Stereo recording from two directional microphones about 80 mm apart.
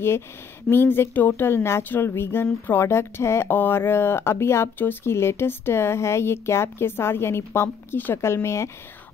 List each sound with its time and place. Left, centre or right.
0.7 s speech: left